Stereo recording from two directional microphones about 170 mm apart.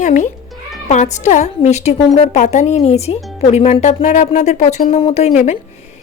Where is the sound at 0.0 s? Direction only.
45° left (ahead or behind).